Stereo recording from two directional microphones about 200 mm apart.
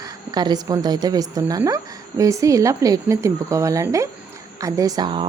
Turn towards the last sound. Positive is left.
turn(degrees=-20)  # may be behind; listen again after turning